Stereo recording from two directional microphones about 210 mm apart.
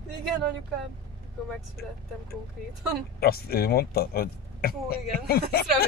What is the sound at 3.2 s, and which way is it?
Speech, 45° left (ahead or behind).